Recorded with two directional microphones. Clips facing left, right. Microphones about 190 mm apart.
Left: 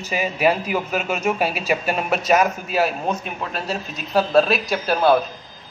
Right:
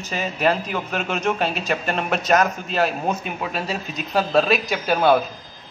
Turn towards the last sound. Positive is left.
turn(degrees=0)  # may be behind; listen again after turning